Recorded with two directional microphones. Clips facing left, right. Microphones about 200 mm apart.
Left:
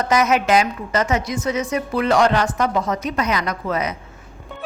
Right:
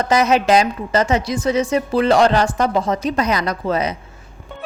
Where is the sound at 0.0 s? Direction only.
30° right (ahead or behind).